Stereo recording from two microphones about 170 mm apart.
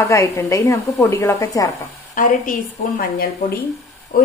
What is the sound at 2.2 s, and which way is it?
Speech, 50° left (ahead or behind).